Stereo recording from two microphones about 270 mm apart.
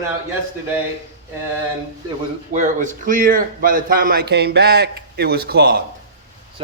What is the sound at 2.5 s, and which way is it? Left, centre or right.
A man's voice, right.